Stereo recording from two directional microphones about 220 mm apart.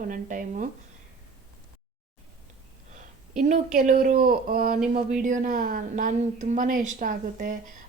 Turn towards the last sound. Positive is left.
turn(degrees=-35)  # may be behind; listen again after turning